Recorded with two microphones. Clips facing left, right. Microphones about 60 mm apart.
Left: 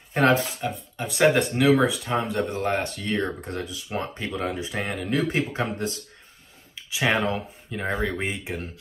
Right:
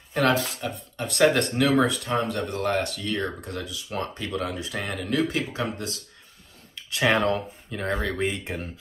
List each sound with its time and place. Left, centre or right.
0.1 s speech: left
0.9 s speech: centre; by 5.9 s left
6.7 s speech: centre